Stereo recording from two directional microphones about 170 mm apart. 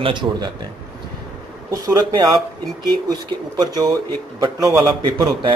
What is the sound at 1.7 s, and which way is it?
Speech, 20° right (ahead or behind).